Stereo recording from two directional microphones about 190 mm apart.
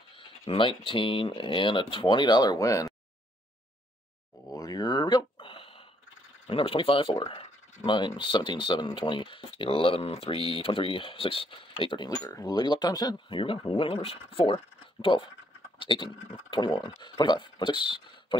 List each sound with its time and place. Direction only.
0.1 s speech: 30° left (ahead or behind)
4.5 s a sound: 20° left (ahead or behind)
6.4 s speech: 30° left (ahead or behind)